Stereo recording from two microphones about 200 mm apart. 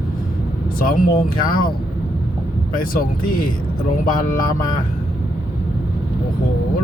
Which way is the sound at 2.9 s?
45° left (ahead or behind).